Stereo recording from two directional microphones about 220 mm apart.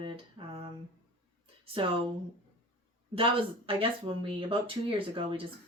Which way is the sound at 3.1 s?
25° right (ahead or behind).